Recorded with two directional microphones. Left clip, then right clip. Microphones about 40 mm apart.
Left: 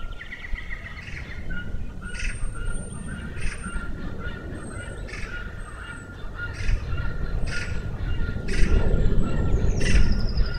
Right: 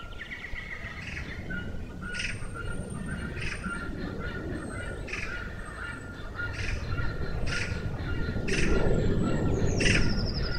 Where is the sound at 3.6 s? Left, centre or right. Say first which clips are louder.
Right 1 dB; right.